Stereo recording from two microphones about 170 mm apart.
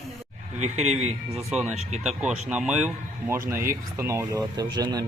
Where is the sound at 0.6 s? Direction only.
40° right (ahead or behind).